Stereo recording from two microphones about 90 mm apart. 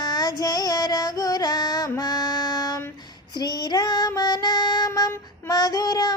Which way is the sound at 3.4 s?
50° left (ahead or behind).